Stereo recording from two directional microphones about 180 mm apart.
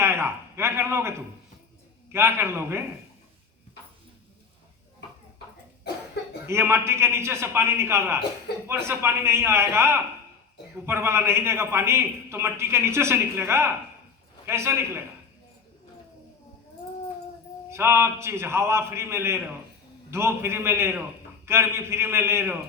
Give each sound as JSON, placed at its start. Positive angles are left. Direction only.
{"t": 0.0, "sound": "a man's voice", "side_deg": -15}
{"t": 2.1, "sound": "a man's voice", "side_deg": -15}
{"t": 6.5, "sound": "a man's voice", "side_deg": -15}
{"t": 8.5, "sound": "speech", "side_deg": 65}
{"t": 8.9, "sound": "a man's voice", "side_deg": -15}
{"t": 17.7, "sound": "a man's voice", "side_deg": -15}